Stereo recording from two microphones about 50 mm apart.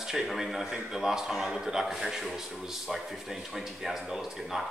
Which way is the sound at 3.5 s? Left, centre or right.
Centre.